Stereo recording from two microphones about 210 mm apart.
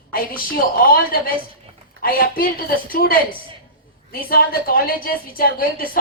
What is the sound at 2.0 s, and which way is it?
A woman's voice, 45° left (ahead or behind).